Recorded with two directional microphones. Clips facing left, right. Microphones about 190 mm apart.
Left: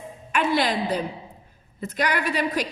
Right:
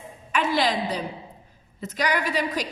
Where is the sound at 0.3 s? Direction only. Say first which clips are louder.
Left 1 dB; 55° left (ahead or behind).